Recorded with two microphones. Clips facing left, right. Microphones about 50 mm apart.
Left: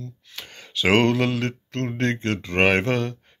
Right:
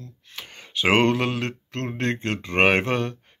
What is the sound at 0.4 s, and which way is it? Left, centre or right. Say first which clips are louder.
Speech: even; right.